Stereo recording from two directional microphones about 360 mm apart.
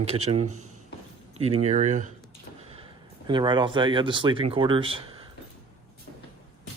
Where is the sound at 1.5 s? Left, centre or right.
Centre.